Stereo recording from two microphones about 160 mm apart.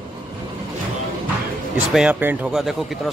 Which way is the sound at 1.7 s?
5° right (ahead or behind).